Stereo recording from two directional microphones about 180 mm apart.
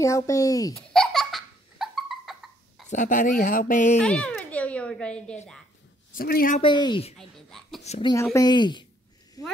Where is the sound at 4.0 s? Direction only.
5° left (ahead or behind).